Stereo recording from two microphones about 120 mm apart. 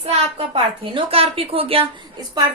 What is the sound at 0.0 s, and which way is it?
A woman's voice, 55° right (ahead or behind).